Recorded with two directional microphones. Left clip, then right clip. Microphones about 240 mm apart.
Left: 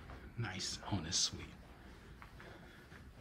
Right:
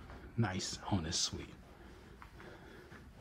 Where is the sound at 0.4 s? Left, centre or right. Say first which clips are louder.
Right 4 dB; centre.